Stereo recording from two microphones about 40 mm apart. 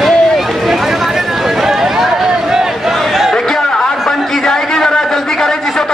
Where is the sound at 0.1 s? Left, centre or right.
Centre.